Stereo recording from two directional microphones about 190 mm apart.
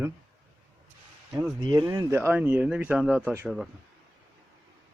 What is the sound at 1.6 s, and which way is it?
Speech, 20° right (ahead or behind).